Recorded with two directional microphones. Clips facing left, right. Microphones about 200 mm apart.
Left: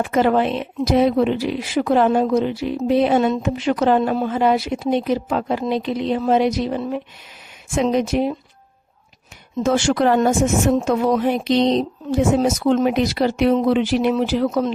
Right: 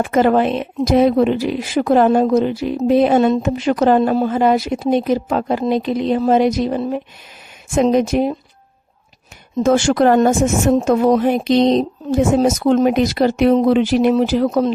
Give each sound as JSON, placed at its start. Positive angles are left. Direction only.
{"t": 0.0, "sound": "speech", "side_deg": -45}
{"t": 9.6, "sound": "speech", "side_deg": -45}